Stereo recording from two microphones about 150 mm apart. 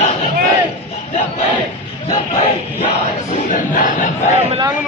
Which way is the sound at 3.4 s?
60° left (ahead or behind).